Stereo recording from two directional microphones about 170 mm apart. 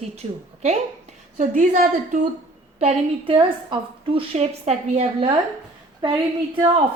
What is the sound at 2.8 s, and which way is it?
A woman's voice, 35° right (ahead or behind).